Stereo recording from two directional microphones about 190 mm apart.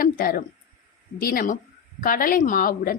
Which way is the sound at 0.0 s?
50° left (ahead or behind).